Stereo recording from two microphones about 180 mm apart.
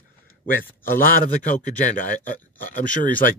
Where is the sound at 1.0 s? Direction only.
50° left (ahead or behind).